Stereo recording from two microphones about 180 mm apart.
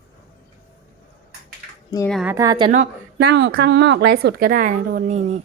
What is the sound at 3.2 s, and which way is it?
Speech, 65° right (ahead or behind).